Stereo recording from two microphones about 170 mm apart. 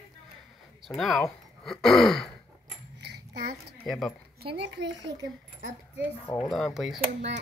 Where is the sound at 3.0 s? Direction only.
75° right (ahead or behind).